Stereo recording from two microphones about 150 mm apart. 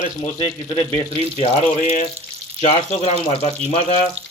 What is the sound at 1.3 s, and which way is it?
Speech, 45° left (ahead or behind).